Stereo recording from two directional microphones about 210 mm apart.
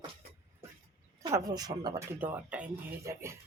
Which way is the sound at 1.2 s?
20° right (ahead or behind).